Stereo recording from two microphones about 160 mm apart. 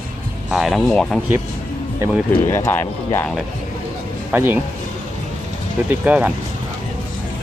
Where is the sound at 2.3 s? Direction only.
15° left (ahead or behind).